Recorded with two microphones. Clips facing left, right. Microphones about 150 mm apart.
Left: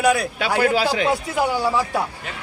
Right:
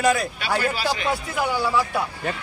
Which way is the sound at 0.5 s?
90° left.